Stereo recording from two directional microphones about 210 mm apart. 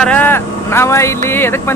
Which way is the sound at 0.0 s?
10° left (ahead or behind).